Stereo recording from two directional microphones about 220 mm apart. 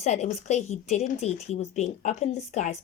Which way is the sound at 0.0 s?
30° left (ahead or behind).